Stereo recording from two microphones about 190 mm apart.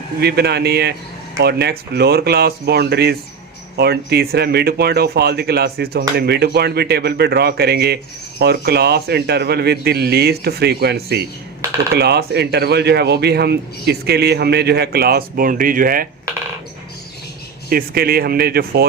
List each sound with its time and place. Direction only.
0.2 s speech: 60° right (ahead or behind)
17.7 s speech: 55° right (ahead or behind)